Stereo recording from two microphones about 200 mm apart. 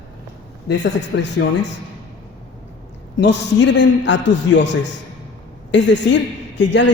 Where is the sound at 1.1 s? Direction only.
65° left (ahead or behind).